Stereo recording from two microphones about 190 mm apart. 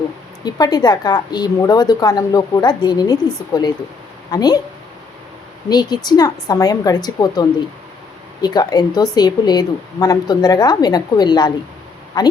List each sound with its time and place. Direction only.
0.4 s a woman's voice: 20° left (ahead or behind)
5.6 s a woman's voice: 20° left (ahead or behind)